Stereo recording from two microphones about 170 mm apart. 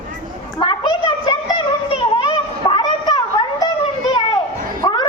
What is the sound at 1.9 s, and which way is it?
Children playing, 25° left (ahead or behind).